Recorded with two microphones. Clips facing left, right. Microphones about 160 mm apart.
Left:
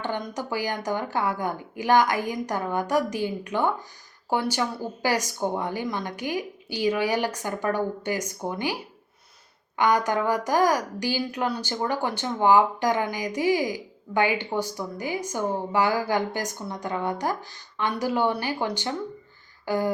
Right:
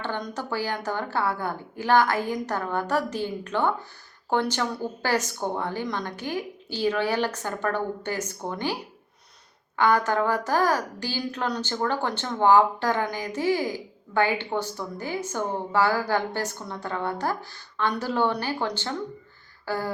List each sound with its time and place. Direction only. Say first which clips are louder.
0.0 s a woman's voice: left 1 dB; 15° left (ahead or behind)
9.7 s a woman's voice: even; 15° left (ahead or behind)
19.6 s a sound: left 4 dB; 15° left (ahead or behind)